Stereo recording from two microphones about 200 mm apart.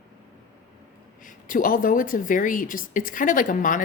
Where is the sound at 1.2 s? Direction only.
45° left (ahead or behind).